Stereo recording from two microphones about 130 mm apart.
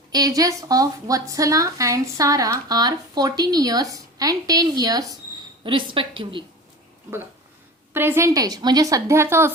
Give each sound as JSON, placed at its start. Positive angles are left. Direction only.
{"t": 0.1, "sound": "a woman's voice", "side_deg": -30}
{"t": 7.9, "sound": "a woman's voice", "side_deg": -20}